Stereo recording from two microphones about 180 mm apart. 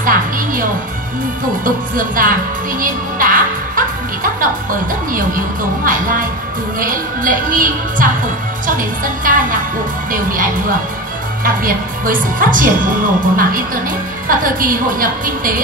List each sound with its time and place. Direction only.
0.0 s a woman's voice: 50° right (ahead or behind)
2.8 s music: 50° right (ahead or behind)
5.9 s a woman's voice: 50° right (ahead or behind)